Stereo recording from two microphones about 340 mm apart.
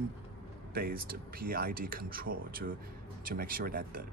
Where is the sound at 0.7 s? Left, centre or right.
Right.